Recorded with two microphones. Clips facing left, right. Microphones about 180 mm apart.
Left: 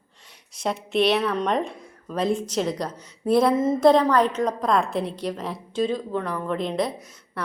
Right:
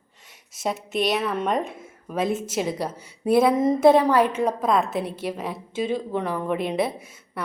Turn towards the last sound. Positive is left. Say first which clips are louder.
# even
turn(degrees=-5)  # may be behind; listen again after turning